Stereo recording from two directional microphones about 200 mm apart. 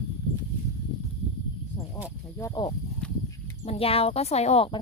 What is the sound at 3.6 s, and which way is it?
Speech, 30° left (ahead or behind).